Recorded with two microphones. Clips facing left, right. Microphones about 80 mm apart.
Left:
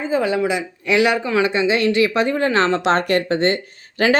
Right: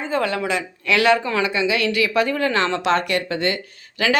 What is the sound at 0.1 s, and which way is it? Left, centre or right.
Speech, centre.